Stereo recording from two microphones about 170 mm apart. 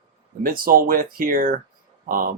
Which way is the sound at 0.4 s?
55° right (ahead or behind).